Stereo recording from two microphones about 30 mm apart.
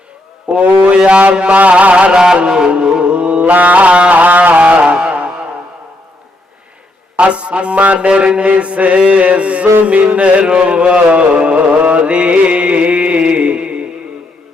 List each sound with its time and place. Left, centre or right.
0.5 s mantra: right
1.8 s music: right
2.1 s mantra: right
3.4 s music: right
4.1 s carnatic music: right
4.7 s a sound: right
7.2 s mantra: right
8.5 s music: right
10.4 s mantra: right